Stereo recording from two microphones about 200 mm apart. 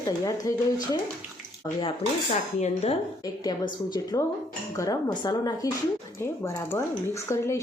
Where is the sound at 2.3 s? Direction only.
35° left (ahead or behind).